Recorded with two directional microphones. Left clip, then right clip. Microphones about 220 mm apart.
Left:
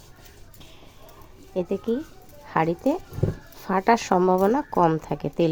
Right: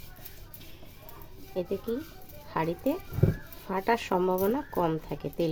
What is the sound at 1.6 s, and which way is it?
Speech, 30° left (ahead or behind).